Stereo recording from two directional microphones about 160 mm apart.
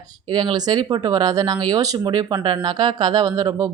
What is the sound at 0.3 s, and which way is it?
Speech, 25° right (ahead or behind).